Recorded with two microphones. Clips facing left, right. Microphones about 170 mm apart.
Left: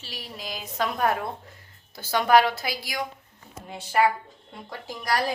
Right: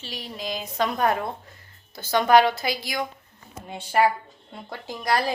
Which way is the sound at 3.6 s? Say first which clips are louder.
Right 2 dB; 30° right (ahead or behind).